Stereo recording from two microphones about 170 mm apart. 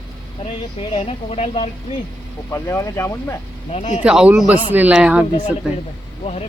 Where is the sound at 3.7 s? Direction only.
40° left (ahead or behind).